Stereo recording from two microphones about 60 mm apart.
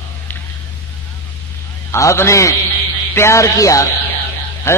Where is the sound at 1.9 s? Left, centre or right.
Left.